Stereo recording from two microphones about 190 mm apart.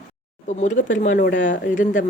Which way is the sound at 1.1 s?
65° left (ahead or behind).